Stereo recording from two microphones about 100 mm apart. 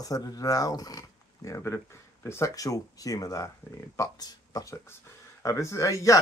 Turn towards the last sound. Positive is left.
turn(degrees=30)  # may be behind; listen again after turning